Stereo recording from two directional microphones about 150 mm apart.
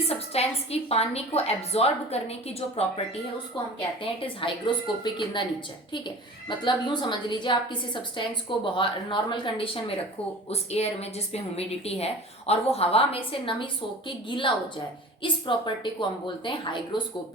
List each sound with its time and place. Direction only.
0.1 s a woman's voice: 40° left (ahead or behind)
4.0 s a woman's voice: 35° left (ahead or behind)
6.7 s a woman's voice: 30° left (ahead or behind)